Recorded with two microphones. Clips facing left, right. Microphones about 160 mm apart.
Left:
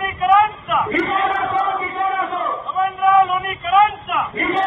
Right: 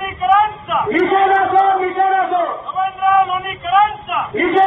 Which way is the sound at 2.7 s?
Centre (ahead or behind).